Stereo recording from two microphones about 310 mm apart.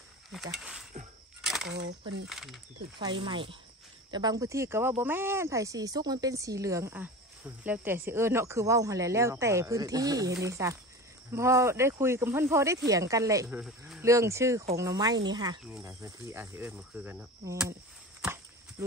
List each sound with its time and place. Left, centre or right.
0.3 s speech: centre
1.4 s coin: centre
1.7 s speech: right
2.2 s speech: centre
3.0 s speech: centre
18.2 s a sound: centre